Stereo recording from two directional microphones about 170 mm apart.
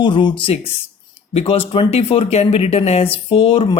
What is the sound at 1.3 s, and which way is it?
Speech, 35° left (ahead or behind).